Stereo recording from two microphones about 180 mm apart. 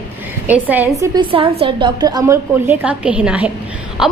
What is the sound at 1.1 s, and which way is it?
A woman's voice, 30° right (ahead or behind).